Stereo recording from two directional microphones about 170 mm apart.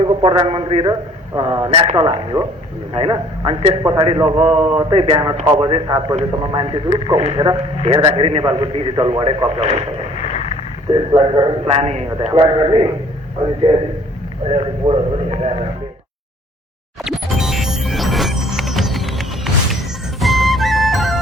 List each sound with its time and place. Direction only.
0.0 s a man's voice: 30° right (ahead or behind)
10.2 s a sound: 40° left (ahead or behind)
10.9 s a man's voice: 30° right (ahead or behind)
17.0 s music: centre (ahead or behind)
20.1 s music: centre (ahead or behind)